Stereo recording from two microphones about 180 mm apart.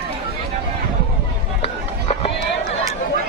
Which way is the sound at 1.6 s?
35° left (ahead or behind).